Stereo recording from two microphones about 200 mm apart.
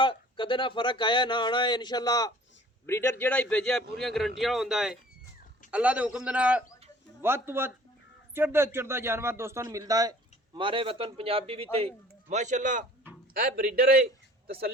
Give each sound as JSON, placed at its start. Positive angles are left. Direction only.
{"t": 0.0, "sound": "a man's voice", "side_deg": 25}